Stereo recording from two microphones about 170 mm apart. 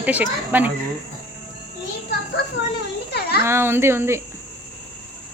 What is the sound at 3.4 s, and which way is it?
Speech, 15° right (ahead or behind).